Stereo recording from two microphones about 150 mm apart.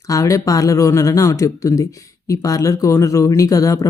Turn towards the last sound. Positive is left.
turn(degrees=20)  # may be behind; listen again after turning